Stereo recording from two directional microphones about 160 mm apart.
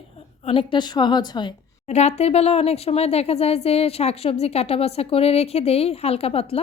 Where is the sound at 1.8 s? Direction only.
45° left (ahead or behind).